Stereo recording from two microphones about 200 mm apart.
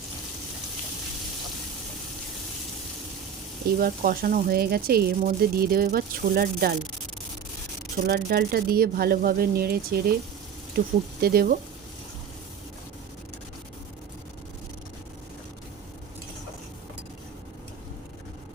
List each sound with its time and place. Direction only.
3.8 s speech: 45° right (ahead or behind)
8.0 s speech: 50° right (ahead or behind)